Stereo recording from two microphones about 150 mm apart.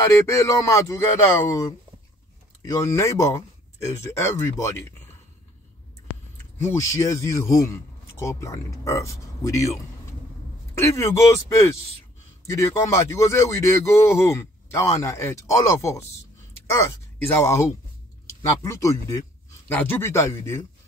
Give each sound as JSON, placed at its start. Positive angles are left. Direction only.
{"t": 0.3, "sound": "a man's voice", "side_deg": 20}
{"t": 6.6, "sound": "a man's voice", "side_deg": 20}
{"t": 11.0, "sound": "a man's voice", "side_deg": 20}